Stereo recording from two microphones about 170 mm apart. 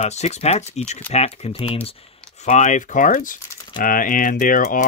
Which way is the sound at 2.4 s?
45° left (ahead or behind).